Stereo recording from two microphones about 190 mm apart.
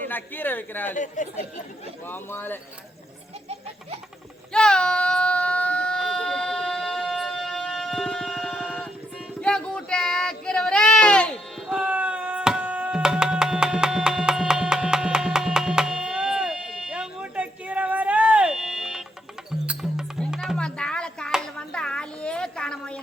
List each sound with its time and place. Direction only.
0.0 s speech: 10° left (ahead or behind)
0.9 s speech: 40° left (ahead or behind)
2.0 s speech: 10° left (ahead or behind)
4.5 s baby cry: 5° left (ahead or behind)
9.4 s a sound: 5° left (ahead or behind)
11.8 s music: 5° right (ahead or behind)